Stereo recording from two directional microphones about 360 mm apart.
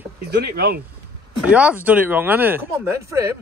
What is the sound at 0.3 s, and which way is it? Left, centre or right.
Speech, right.